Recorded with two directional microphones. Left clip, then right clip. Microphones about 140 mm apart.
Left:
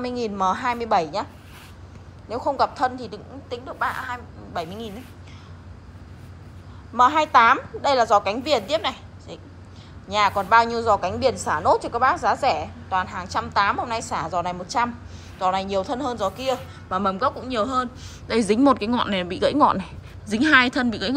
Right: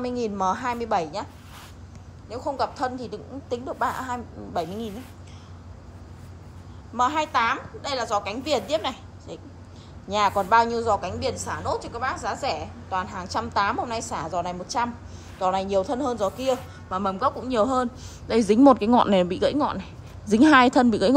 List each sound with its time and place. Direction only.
0.0 s a woman's voice: 25° right (ahead or behind)
2.2 s a woman's voice: 10° right (ahead or behind); by 5.0 s 25° right (ahead or behind)
7.0 s a woman's voice: 10° right (ahead or behind)
8.5 s a woman's voice: 20° right (ahead or behind)
11.0 s a woman's voice: 10° right (ahead or behind)
12.9 s a woman's voice: 25° right (ahead or behind)
16.5 s a woman's voice: 15° right (ahead or behind)
17.3 s a man's voice: 30° right (ahead or behind)
18.3 s a woman's voice: 20° right (ahead or behind)
19.5 s a woman's voice: 5° right (ahead or behind)
20.2 s a woman's voice: 30° right (ahead or behind)